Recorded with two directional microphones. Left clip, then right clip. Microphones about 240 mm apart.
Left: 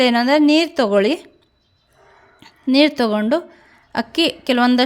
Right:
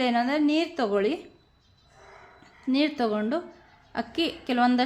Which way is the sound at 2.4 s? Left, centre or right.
Left.